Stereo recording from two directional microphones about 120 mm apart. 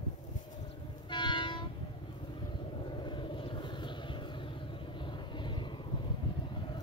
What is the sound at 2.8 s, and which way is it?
Vehicle, 40° left (ahead or behind).